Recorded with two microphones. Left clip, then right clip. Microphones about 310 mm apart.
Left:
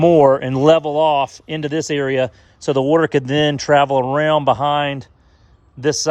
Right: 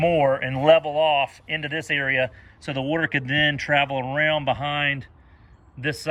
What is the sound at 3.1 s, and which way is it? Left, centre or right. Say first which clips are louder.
Speech: left 5 dB; centre.